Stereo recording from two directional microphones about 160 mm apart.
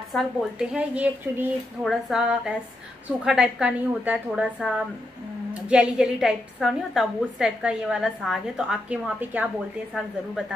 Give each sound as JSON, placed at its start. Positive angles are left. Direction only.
{"t": 0.1, "sound": "a woman's voice", "side_deg": -5}